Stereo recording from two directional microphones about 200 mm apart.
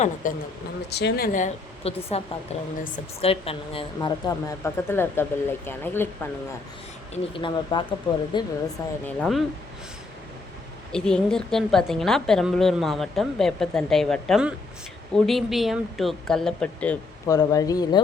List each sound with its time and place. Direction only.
0.0 s speech: 40° left (ahead or behind)
0.9 s speech: 55° left (ahead or behind); by 6.1 s 10° left (ahead or behind)
7.1 s speech: 25° left (ahead or behind)
9.0 s a woman's voice: 5° left (ahead or behind)
10.9 s a woman's voice: 5° left (ahead or behind)
17.2 s speech: 20° left (ahead or behind)